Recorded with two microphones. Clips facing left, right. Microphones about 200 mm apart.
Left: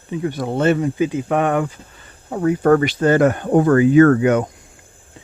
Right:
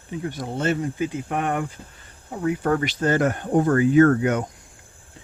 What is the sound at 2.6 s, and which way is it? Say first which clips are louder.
Speech: left 9 dB; 60° left (ahead or behind).